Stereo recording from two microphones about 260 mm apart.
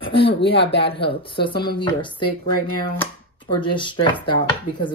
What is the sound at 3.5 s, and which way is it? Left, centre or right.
Speech, centre.